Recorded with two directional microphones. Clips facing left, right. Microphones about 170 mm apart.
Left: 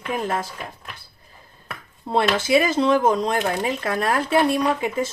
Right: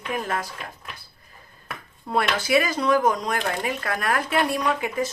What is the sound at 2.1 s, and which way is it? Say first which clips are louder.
Speech: left 3 dB; 25° left (ahead or behind).